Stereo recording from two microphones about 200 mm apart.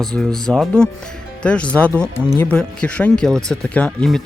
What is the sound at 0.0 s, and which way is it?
Speech, 5° left (ahead or behind).